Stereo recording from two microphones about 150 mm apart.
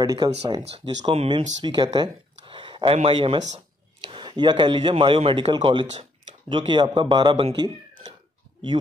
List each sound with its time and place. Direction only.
0.0 s a man's voice: 30° right (ahead or behind)